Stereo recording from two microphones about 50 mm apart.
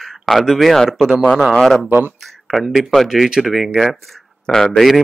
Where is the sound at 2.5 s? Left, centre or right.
Centre.